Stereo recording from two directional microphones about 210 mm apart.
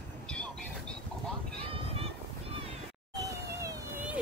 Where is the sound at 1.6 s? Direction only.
25° right (ahead or behind).